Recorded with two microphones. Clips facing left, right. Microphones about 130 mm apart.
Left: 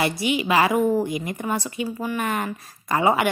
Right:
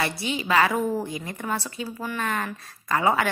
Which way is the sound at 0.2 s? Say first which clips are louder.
Left 6 dB; 75° left (ahead or behind).